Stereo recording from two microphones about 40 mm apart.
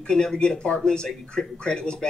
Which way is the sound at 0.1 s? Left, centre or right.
Centre.